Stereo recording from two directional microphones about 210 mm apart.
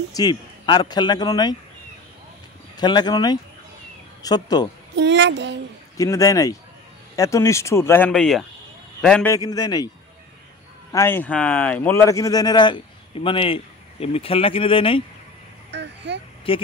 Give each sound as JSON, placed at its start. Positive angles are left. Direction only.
{"t": 0.1, "sound": "a man's voice", "side_deg": 20}
{"t": 2.8, "sound": "a man's voice", "side_deg": 20}
{"t": 4.9, "sound": "a child's voice", "side_deg": -55}
{"t": 5.9, "sound": "a man's voice", "side_deg": 15}
{"t": 9.3, "sound": "a man's voice", "side_deg": 20}
{"t": 10.9, "sound": "a man's voice", "side_deg": 10}
{"t": 15.7, "sound": "a sound", "side_deg": -55}
{"t": 16.5, "sound": "a man's voice", "side_deg": 25}